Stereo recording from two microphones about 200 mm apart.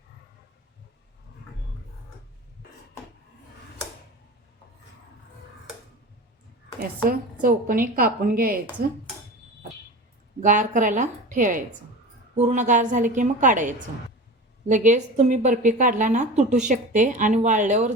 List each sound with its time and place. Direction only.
7.1 s a woman's voice: 45° right (ahead or behind)
10.4 s speech: 40° right (ahead or behind)